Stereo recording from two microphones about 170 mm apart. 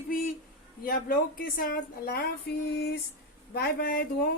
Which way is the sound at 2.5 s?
70° left (ahead or behind).